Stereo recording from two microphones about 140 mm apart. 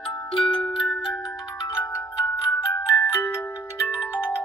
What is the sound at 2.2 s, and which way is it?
Music, 25° left (ahead or behind).